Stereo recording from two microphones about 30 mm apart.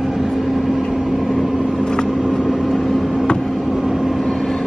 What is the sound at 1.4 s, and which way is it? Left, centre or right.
Vehicle, right.